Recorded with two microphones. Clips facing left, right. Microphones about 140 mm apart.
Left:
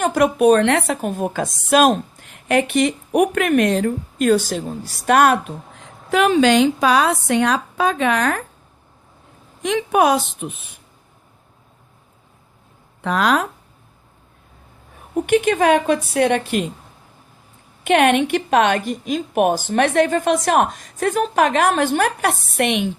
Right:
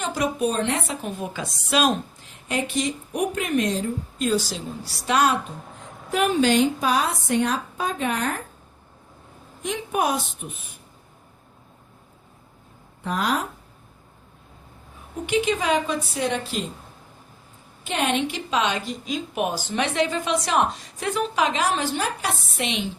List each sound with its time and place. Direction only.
0.0 s a woman's voice: 60° left (ahead or behind)
6.1 s a woman's voice: 90° left
9.6 s a woman's voice: 90° left
13.0 s a woman's voice: 90° left
15.1 s a woman's voice: 55° left (ahead or behind)
17.8 s a woman's voice: 65° left (ahead or behind)